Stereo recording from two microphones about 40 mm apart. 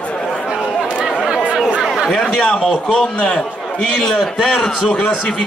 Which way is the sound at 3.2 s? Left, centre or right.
Centre.